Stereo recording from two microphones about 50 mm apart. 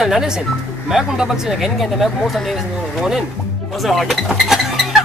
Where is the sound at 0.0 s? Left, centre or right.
Centre.